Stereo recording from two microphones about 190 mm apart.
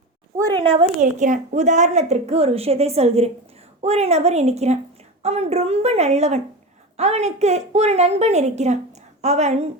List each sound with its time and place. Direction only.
0.6 s a woman's voice: 30° right (ahead or behind)
1.0 s a woman's voice: 40° right (ahead or behind)